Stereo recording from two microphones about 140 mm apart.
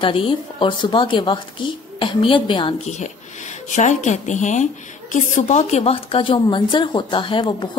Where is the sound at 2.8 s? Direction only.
60° left (ahead or behind).